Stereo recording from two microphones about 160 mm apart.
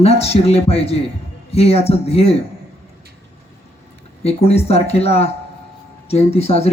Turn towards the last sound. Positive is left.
turn(degrees=40)  # may be behind; listen again after turning